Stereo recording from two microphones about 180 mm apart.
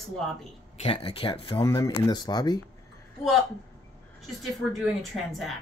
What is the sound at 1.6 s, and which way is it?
Speech, 20° left (ahead or behind).